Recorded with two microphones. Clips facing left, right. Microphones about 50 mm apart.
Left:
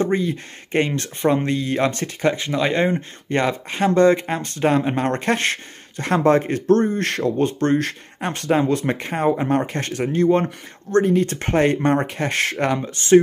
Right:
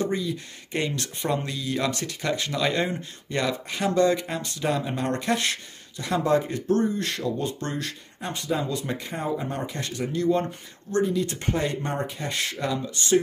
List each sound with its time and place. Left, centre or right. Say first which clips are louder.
0.0 s speech: left 6 dB; left